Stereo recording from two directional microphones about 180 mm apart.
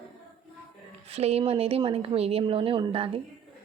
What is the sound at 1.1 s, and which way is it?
A woman's voice, 35° right (ahead or behind).